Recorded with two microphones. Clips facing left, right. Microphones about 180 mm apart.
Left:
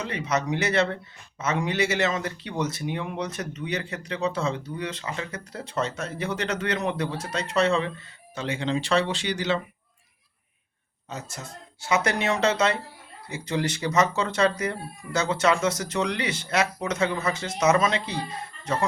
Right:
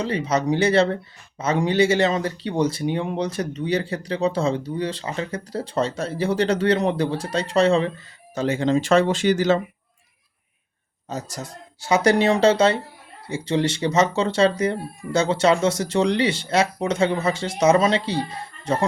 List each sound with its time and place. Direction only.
0.0 s speech: 30° right (ahead or behind)
11.1 s speech: 35° right (ahead or behind)